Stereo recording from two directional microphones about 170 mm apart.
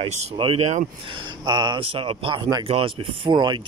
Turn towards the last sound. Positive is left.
turn(degrees=-25)  # may be behind; listen again after turning